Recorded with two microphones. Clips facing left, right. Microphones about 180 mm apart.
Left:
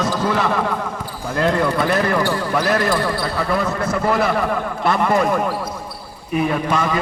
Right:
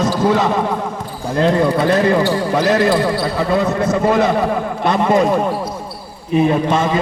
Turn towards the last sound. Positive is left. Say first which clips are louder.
# right 4 dB
turn(degrees=-25)  # may be behind; listen again after turning